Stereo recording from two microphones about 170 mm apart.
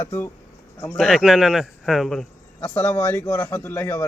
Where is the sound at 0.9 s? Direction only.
Centre (ahead or behind).